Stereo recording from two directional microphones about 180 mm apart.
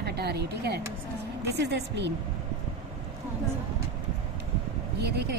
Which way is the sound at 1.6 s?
75° right (ahead or behind).